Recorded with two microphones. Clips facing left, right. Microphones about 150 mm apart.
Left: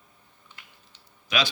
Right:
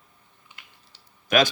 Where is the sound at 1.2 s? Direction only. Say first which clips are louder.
Right 7 dB; 50° right (ahead or behind).